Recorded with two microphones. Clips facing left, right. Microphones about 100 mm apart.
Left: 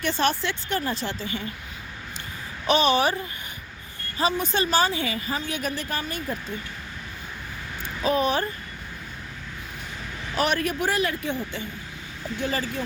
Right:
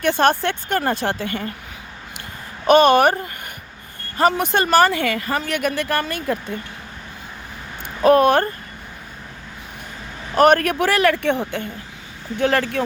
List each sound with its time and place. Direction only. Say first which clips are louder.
0.0 s a woman's voice: right 7 dB; 55° right (ahead or behind)
2.6 s a woman's voice: right 8 dB; 55° right (ahead or behind)
8.0 s a woman's voice: right 10 dB; 60° right (ahead or behind)
10.3 s a woman's voice: right 10 dB; 50° right (ahead or behind); by 12.8 s 65° right (ahead or behind)